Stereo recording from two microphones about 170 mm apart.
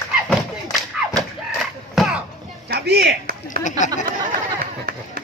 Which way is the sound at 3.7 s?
45° left (ahead or behind).